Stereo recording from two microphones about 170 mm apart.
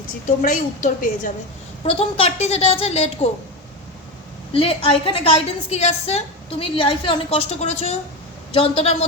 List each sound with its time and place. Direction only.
0.3 s a woman's voice: 50° left (ahead or behind)
1.9 s a woman's voice: 35° left (ahead or behind)
4.5 s a woman's voice: 30° left (ahead or behind)